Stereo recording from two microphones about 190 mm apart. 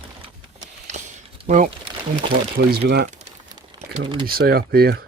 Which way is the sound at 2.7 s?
55° right (ahead or behind).